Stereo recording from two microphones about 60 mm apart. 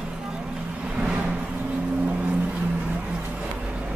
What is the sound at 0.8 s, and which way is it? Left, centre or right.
Vehicle, centre.